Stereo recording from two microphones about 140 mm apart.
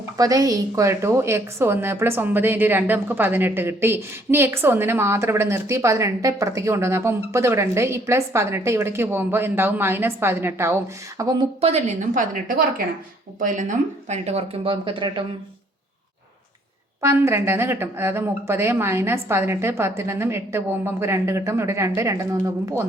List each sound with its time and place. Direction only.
0.2 s a woman's voice: 25° right (ahead or behind)
11.6 s a woman's voice: 50° right (ahead or behind); by 12.8 s 90° right
13.4 s speech: 65° right (ahead or behind); by 15.2 s 40° right (ahead or behind)
17.0 s speech: 20° right (ahead or behind)